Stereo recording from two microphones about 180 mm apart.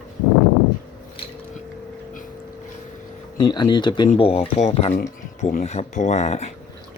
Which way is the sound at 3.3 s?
25° left (ahead or behind).